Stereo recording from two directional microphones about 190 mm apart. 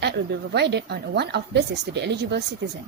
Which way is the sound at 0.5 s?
60° right (ahead or behind).